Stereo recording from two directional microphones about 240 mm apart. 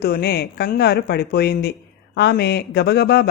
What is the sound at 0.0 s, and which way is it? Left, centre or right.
Speech, left.